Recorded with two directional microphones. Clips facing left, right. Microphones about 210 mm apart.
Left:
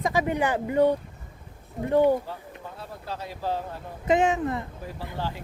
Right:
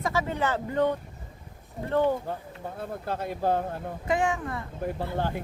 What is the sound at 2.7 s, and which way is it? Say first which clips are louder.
Speech: right 5 dB; 55° right (ahead or behind).